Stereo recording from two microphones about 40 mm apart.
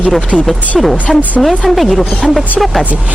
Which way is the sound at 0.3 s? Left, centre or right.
Left.